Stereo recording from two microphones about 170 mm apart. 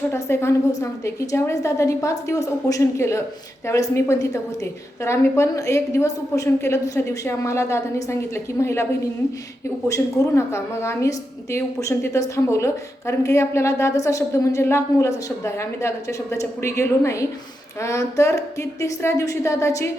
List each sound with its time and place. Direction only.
0.1 s a woman's voice: 15° left (ahead or behind)
9.9 s a woman's voice: 15° left (ahead or behind)